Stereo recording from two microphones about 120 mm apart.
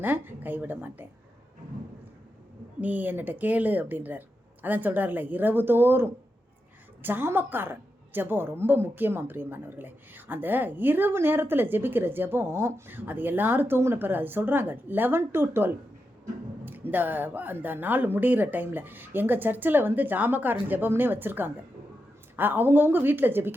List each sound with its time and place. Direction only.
0.0 s a woman's voice: 15° right (ahead or behind)
2.8 s a woman's voice: 15° right (ahead or behind)